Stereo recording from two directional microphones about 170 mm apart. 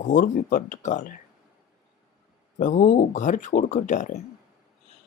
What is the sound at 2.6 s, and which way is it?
Speech, 50° left (ahead or behind).